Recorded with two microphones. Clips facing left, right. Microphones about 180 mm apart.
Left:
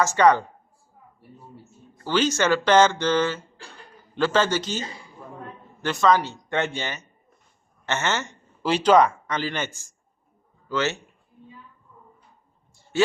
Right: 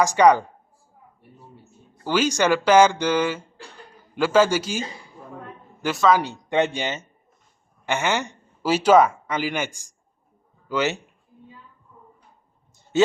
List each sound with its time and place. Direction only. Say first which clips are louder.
0.0 s speech: right 2 dB; 15° right (ahead or behind)
2.0 s speech: right 1 dB; 10° right (ahead or behind)
6.5 s a man's voice: right 5 dB; 15° right (ahead or behind)